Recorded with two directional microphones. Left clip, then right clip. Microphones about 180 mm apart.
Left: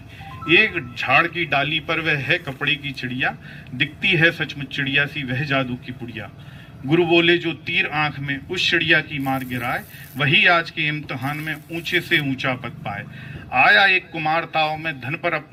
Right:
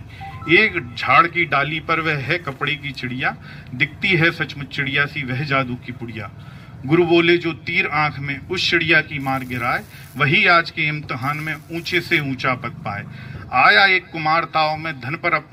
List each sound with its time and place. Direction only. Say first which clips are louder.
0.4 s a man's voice: right 1 dB; 55° left (ahead or behind)
6.9 s a man's voice: right 1 dB; 50° left (ahead or behind)